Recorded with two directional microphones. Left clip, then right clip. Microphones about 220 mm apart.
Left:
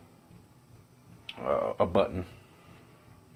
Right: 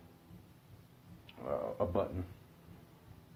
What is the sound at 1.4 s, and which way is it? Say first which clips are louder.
Speech: left 9 dB; 50° left (ahead or behind).